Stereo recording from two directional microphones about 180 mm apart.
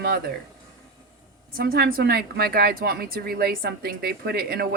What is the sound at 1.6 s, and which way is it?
A woman's voice, 60° right (ahead or behind).